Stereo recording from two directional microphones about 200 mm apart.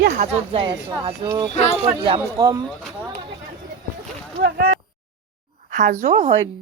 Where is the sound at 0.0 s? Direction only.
45° right (ahead or behind).